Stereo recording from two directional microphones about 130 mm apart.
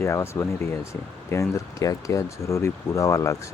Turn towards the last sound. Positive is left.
turn(degrees=25)  # may be behind; listen again after turning